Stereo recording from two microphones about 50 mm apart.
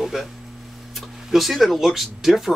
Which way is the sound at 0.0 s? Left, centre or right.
Centre.